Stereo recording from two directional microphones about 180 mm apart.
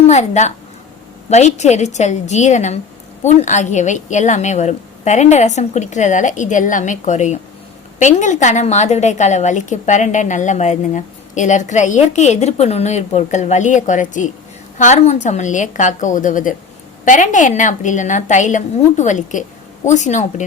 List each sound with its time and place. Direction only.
0.0 s a woman's voice: 40° left (ahead or behind)